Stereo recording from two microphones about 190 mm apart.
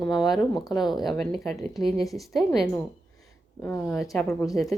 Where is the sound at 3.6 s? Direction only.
10° left (ahead or behind).